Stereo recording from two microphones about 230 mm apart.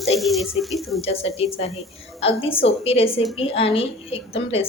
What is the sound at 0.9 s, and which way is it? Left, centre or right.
A woman's voice, left.